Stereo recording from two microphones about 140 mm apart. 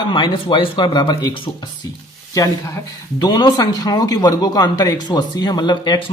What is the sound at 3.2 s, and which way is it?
Speech, 30° left (ahead or behind).